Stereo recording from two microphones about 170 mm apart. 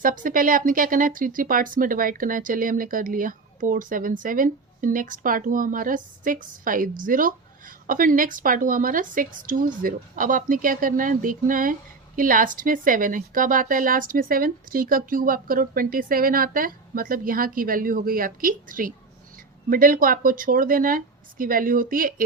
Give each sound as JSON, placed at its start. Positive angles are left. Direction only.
{"t": 0.0, "sound": "a woman's voice", "side_deg": -55}